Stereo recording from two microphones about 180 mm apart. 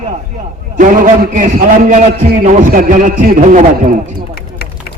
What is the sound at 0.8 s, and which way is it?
A man's voice, 50° right (ahead or behind).